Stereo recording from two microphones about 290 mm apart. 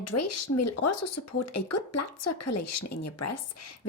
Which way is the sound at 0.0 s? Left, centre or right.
Left.